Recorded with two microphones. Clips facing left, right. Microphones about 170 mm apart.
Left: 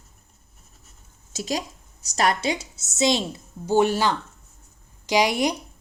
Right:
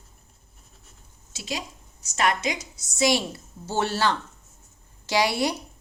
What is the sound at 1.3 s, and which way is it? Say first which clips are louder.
A woman's voice: left 6 dB; 40° left (ahead or behind).